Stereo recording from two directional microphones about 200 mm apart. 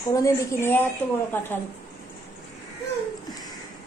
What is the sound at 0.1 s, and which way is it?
Speech, 15° left (ahead or behind).